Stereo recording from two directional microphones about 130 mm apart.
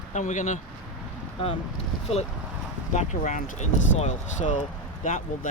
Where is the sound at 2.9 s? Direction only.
70° left (ahead or behind).